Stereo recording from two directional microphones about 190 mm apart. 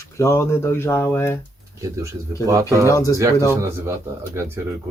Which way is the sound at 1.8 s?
15° right (ahead or behind).